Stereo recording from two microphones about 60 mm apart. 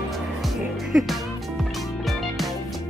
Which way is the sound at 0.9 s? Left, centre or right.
Centre.